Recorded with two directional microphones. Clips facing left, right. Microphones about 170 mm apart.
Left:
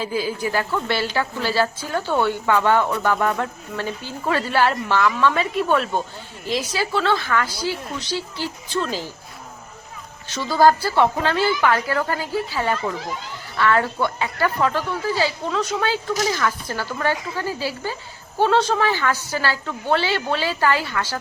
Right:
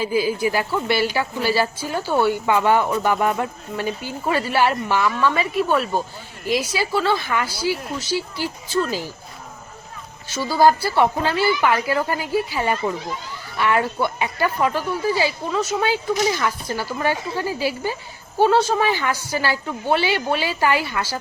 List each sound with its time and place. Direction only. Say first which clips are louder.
0.0 s speech: right 4 dB; 10° right (ahead or behind)
10.2 s speech: even; 10° right (ahead or behind)